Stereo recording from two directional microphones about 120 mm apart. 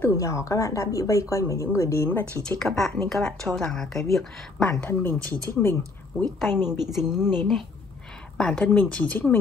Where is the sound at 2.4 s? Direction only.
5° left (ahead or behind).